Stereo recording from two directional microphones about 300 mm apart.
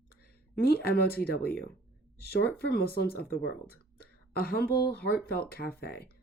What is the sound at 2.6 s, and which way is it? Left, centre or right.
Speech, left.